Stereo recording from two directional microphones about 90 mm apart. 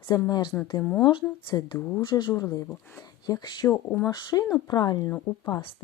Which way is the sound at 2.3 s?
35° left (ahead or behind).